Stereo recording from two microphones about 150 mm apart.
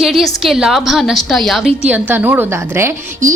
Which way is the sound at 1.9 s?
10° right (ahead or behind).